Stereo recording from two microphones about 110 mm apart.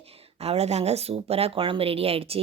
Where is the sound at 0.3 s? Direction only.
75° right (ahead or behind).